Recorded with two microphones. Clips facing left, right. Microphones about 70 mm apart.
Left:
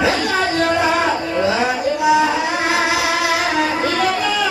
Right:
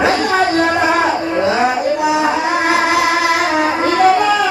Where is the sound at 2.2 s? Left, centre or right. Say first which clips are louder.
Right 2 dB; right.